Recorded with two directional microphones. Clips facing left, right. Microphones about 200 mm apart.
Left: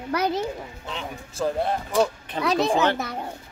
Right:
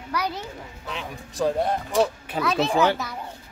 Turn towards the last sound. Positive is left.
turn(degrees=50)  # may be behind; listen again after turning